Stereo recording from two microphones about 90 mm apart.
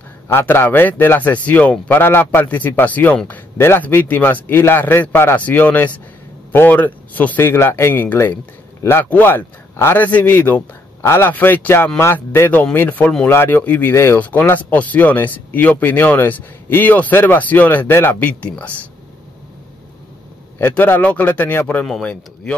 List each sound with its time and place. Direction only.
0.3 s speech: 25° left (ahead or behind)
13.0 s speech: 5° left (ahead or behind)
13.3 s speech: 25° left (ahead or behind)
20.5 s speech: 20° left (ahead or behind)
21.8 s speech: 5° left (ahead or behind)